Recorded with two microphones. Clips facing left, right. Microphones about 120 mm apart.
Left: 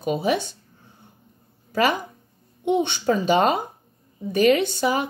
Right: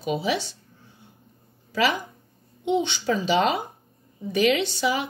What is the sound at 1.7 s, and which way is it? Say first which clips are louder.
Speech: left 2 dB; 50° left (ahead or behind).